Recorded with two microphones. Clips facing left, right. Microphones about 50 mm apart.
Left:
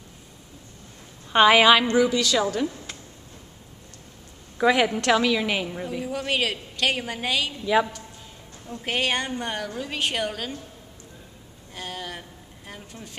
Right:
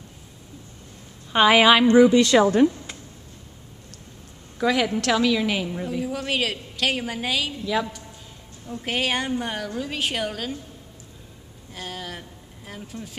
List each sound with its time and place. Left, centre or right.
1.3 s a woman's voice: centre
1.9 s speech: right
4.6 s a woman's voice: centre
7.6 s a woman's voice: centre
8.6 s a woman's voice: centre
11.7 s speech: centre